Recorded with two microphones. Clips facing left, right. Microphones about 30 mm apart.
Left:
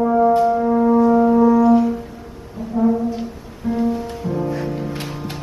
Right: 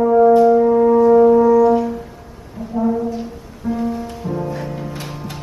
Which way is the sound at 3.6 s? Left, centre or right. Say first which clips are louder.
Even; left.